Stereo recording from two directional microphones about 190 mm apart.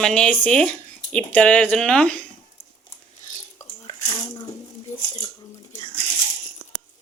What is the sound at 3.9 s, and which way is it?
Speech, 25° left (ahead or behind).